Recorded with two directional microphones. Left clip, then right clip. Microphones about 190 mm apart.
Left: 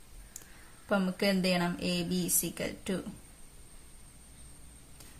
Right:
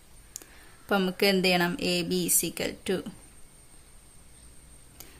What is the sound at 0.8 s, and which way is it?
Speech, 25° right (ahead or behind).